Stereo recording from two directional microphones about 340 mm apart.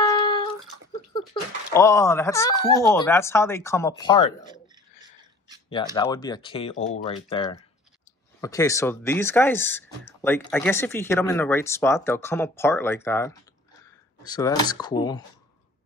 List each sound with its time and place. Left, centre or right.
0.0 s bathtub: centre
1.7 s speech: centre
5.9 s speech: centre